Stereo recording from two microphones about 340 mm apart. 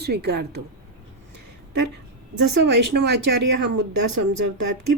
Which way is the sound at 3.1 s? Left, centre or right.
Right.